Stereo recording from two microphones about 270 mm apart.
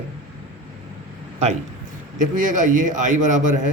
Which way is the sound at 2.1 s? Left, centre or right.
Right.